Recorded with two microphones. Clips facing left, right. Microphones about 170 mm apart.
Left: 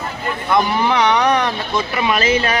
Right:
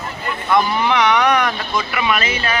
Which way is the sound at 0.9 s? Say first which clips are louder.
Even; 30° left (ahead or behind).